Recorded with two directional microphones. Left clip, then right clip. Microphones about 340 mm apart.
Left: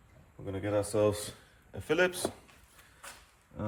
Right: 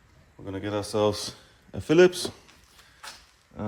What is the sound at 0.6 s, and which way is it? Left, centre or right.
A man's voice, centre.